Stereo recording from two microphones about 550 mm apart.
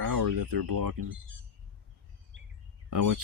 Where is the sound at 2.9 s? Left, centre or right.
Right.